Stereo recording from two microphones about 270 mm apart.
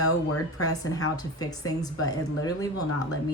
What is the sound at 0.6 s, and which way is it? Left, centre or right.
A woman's voice, centre.